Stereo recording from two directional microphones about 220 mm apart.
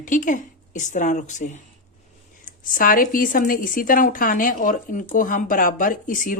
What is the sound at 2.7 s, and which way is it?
Speech, 40° left (ahead or behind).